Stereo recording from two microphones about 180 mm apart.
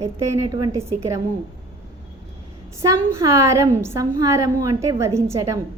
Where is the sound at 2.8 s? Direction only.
15° right (ahead or behind).